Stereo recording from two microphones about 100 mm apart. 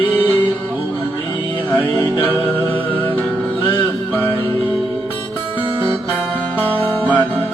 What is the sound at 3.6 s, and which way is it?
Music, 20° left (ahead or behind).